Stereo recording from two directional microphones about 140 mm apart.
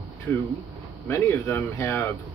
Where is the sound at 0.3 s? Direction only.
10° left (ahead or behind).